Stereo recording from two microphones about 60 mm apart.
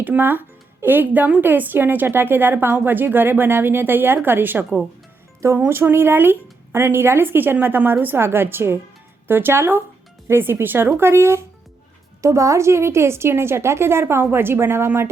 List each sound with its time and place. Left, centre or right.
0.0 s speech: right
12.2 s a woman's voice: right